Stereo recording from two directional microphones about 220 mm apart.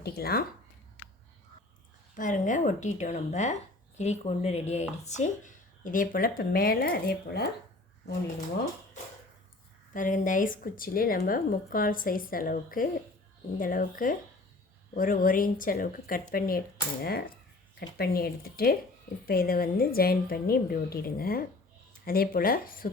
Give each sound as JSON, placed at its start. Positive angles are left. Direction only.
{"t": 0.0, "sound": "a woman's voice", "side_deg": 45}
{"t": 2.1, "sound": "speech", "side_deg": 35}
{"t": 9.9, "sound": "a woman's voice", "side_deg": 35}